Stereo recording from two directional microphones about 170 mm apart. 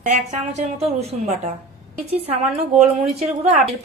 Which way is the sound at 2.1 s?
40° right (ahead or behind).